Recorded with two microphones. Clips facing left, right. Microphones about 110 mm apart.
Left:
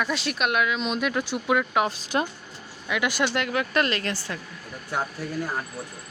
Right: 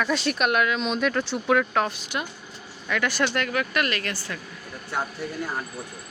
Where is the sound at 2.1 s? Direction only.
35° left (ahead or behind).